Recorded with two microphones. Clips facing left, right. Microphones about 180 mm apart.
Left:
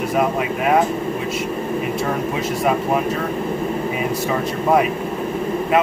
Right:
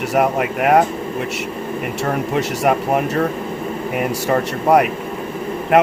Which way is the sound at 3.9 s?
70° right (ahead or behind).